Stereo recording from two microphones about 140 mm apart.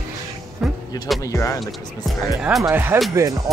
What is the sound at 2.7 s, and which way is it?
Speech, 15° right (ahead or behind).